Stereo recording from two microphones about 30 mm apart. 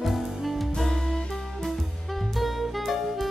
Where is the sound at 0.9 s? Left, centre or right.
Centre.